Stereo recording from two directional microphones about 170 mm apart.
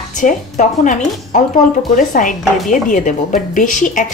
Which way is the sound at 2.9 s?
50° left (ahead or behind).